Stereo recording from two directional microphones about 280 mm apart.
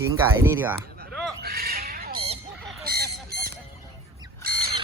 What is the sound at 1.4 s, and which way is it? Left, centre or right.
Squawk, right.